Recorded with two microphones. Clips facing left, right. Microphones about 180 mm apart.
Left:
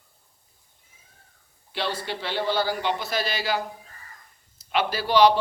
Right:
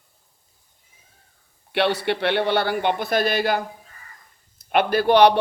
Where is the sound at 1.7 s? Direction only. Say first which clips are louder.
Right 8 dB; 65° right (ahead or behind).